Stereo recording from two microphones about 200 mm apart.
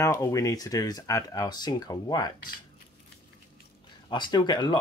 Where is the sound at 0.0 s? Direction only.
15° left (ahead or behind).